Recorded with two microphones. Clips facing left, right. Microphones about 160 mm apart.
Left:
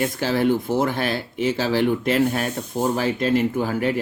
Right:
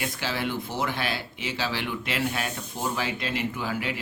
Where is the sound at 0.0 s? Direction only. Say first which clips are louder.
Left 9 dB; 45° left (ahead or behind).